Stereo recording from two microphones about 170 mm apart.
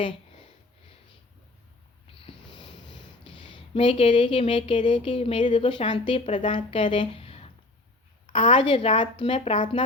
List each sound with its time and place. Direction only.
2.2 s a woman's voice: 30° left (ahead or behind)